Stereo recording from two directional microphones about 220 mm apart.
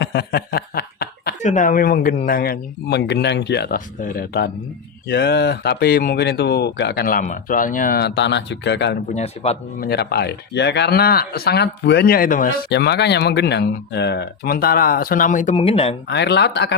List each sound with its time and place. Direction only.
0.0 s snicker: 50° left (ahead or behind)
1.4 s speech: 35° left (ahead or behind); by 9.0 s 55° left (ahead or behind)
9.1 s speech: 30° left (ahead or behind)
9.8 s speech: 45° left (ahead or behind); by 16.0 s 25° left (ahead or behind)
16.0 s speech: 50° left (ahead or behind)